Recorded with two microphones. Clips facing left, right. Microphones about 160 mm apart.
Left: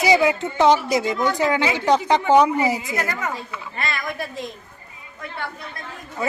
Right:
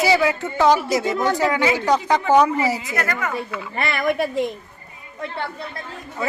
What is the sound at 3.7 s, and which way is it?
Speech, 60° right (ahead or behind).